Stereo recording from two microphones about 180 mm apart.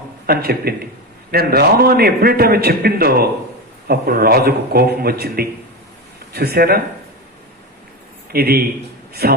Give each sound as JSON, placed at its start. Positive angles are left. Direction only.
{"t": 0.3, "sound": "a man's voice", "side_deg": -55}
{"t": 8.3, "sound": "a man's voice", "side_deg": -60}